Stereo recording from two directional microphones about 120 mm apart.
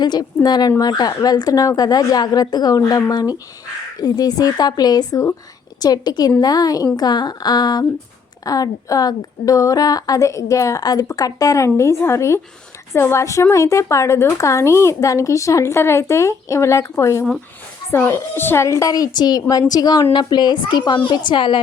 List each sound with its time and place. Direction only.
0.0 s a woman's voice: 35° left (ahead or behind)